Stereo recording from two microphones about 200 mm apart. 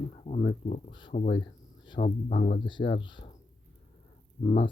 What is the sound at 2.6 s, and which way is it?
Speech, 25° left (ahead or behind).